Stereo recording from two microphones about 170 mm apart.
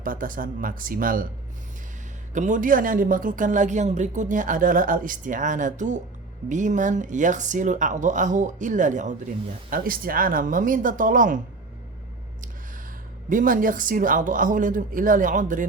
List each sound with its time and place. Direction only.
0.0 s speech: 55° right (ahead or behind)
2.3 s speech: 50° right (ahead or behind)
13.3 s speech: 50° right (ahead or behind)